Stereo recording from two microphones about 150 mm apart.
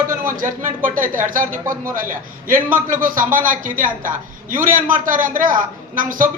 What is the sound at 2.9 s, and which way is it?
A woman's voice, 65° right (ahead or behind).